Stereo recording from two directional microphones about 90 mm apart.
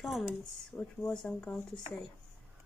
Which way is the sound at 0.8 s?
10° left (ahead or behind).